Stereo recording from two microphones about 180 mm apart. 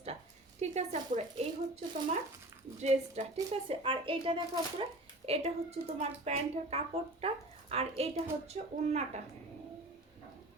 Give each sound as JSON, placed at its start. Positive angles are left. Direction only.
{"t": 0.6, "sound": "speech", "side_deg": -40}
{"t": 2.8, "sound": "speech", "side_deg": -40}